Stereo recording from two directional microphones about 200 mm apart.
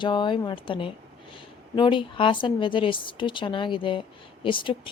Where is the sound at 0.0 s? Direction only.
25° left (ahead or behind).